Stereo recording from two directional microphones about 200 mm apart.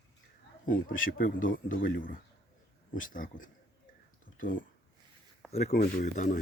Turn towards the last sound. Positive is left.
turn(degrees=40)  # may be behind; listen again after turning